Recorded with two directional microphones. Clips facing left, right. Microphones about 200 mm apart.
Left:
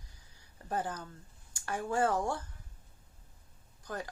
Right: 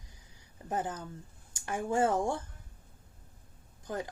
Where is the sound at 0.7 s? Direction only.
20° right (ahead or behind).